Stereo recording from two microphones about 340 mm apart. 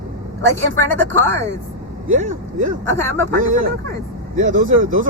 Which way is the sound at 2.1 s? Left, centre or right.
Right.